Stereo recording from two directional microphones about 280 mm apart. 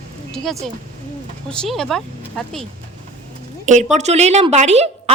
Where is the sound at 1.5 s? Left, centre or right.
Centre.